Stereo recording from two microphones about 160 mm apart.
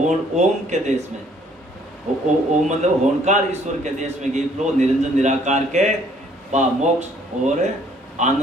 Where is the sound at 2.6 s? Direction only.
45° right (ahead or behind).